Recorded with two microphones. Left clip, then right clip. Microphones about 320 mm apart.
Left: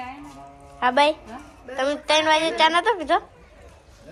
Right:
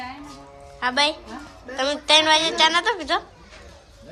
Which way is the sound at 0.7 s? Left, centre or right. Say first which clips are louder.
Left 3 dB; centre.